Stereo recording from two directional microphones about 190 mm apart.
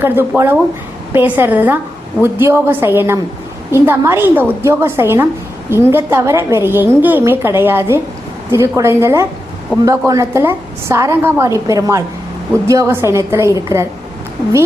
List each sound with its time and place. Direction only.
0.0 s a woman's voice: 10° right (ahead or behind)